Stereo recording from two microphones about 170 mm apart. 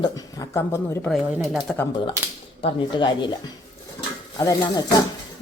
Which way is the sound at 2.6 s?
30° left (ahead or behind).